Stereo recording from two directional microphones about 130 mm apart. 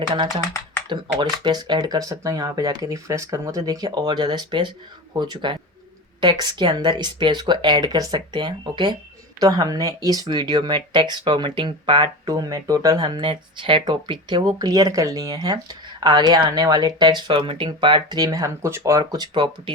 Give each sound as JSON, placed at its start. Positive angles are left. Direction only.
{"t": 0.9, "sound": "speech", "side_deg": -35}